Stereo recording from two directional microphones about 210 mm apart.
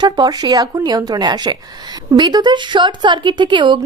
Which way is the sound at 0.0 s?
20° right (ahead or behind).